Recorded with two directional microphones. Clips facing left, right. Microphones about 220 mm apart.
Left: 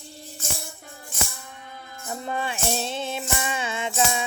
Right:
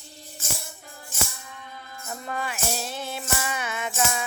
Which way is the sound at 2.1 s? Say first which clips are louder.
Left 3 dB; 25° left (ahead or behind).